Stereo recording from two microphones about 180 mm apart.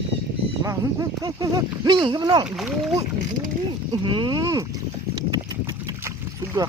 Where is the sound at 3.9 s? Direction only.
25° right (ahead or behind).